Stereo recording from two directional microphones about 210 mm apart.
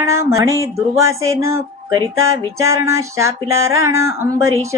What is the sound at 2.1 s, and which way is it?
Music, 75° right (ahead or behind).